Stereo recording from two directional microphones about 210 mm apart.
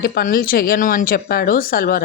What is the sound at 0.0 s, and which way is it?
Speech, 45° left (ahead or behind).